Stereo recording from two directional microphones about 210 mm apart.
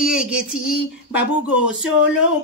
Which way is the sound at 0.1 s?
5° right (ahead or behind).